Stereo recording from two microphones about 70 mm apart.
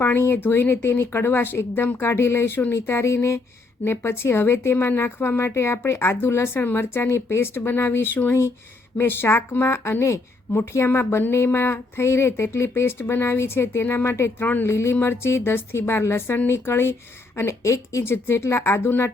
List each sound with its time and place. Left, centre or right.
0.0 s speech: left
14.7 s speech: left
17.3 s speech: left